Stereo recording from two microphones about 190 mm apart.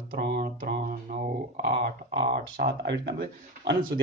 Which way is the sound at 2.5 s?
60° right (ahead or behind).